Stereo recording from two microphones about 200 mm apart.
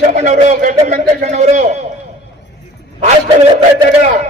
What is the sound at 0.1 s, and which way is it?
Speech, 40° right (ahead or behind).